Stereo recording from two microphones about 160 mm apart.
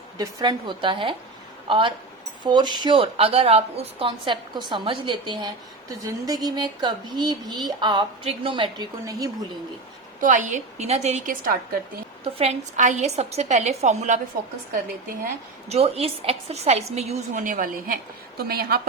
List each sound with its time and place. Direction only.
0.2 s a woman's voice: 25° right (ahead or behind)
9.0 s speech: 20° right (ahead or behind)
10.2 s a woman's voice: 50° right (ahead or behind)
12.2 s a woman's voice: 40° right (ahead or behind)
15.7 s a woman's voice: 40° right (ahead or behind); by 18.8 s 70° right (ahead or behind)